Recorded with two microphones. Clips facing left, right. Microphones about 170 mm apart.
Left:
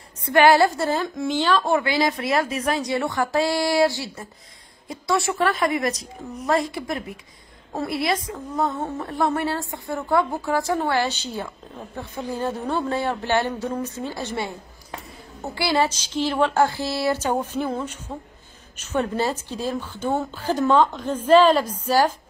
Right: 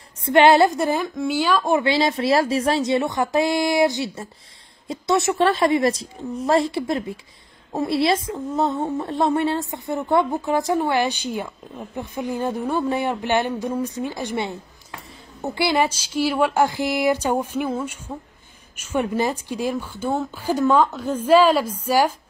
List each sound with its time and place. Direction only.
0.2 s speech: 25° right (ahead or behind)
1.0 s a woman's voice: centre (ahead or behind)
1.8 s a woman's voice: 25° right (ahead or behind)